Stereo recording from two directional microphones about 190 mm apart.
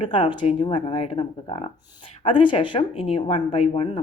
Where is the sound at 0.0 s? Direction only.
25° left (ahead or behind).